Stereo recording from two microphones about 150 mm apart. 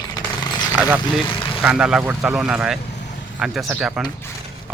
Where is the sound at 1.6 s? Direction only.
5° right (ahead or behind).